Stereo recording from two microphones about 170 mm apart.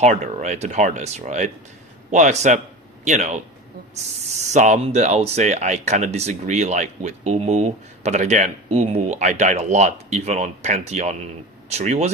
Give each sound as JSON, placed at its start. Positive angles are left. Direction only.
{"t": 0.0, "sound": "speech", "side_deg": -45}
{"t": 4.4, "sound": "speech", "side_deg": -45}